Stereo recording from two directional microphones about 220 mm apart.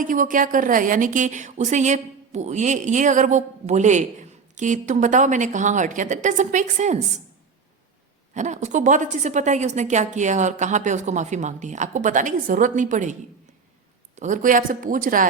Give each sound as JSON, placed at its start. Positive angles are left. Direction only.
{"t": 0.0, "sound": "a woman's voice", "side_deg": -35}
{"t": 8.3, "sound": "a woman's voice", "side_deg": -35}
{"t": 14.2, "sound": "a woman's voice", "side_deg": -35}